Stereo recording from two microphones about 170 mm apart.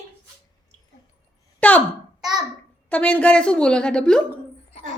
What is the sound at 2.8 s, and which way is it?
A woman's voice, 10° left (ahead or behind).